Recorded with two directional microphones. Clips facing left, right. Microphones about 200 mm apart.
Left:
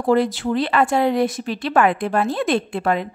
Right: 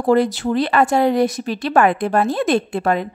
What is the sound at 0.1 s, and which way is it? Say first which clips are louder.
A woman's voice: right 2 dB; 45° right (ahead or behind).